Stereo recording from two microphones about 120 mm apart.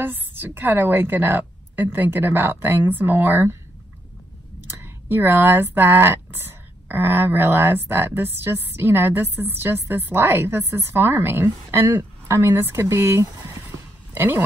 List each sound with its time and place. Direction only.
0.0 s a woman's voice: 15° right (ahead or behind)
4.6 s speech: 20° right (ahead or behind)